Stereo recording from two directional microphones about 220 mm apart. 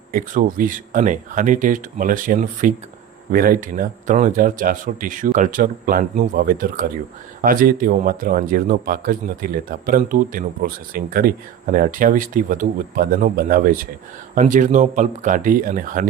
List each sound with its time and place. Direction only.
0.1 s speech: 40° right (ahead or behind)